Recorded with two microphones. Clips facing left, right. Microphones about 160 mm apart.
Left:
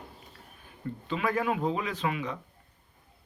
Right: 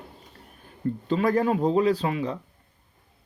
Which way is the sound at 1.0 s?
40° right (ahead or behind).